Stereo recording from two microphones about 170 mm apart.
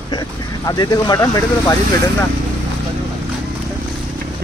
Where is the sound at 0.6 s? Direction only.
20° left (ahead or behind).